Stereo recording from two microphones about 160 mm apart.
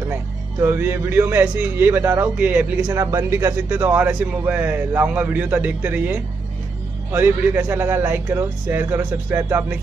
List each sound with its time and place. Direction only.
0.1 s a man's voice: 15° right (ahead or behind)